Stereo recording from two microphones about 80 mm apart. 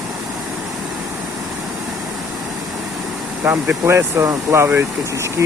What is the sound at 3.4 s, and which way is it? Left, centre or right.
Speech, right.